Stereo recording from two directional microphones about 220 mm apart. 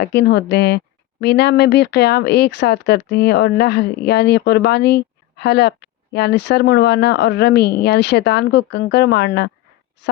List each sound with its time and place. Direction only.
0.0 s speech: 50° left (ahead or behind)